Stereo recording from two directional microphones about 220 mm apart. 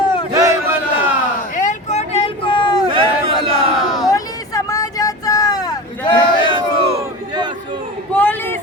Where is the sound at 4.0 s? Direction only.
15° left (ahead or behind).